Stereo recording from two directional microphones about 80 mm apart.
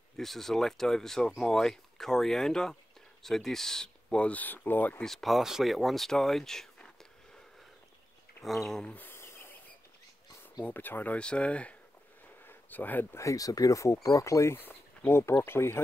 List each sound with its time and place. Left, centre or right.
0.2 s speech: centre; by 5.0 s left
5.0 s speech: centre
8.5 s speech: centre
8.8 s a sound: left
10.6 s speech: left
12.4 s a sound: left
13.2 s speech: left